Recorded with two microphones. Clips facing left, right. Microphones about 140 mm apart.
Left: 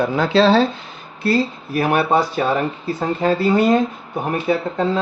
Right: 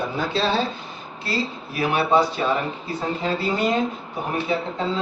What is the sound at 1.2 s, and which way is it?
Speech, 50° left (ahead or behind).